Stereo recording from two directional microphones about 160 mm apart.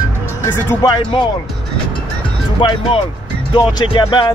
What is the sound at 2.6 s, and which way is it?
Speech, 30° left (ahead or behind).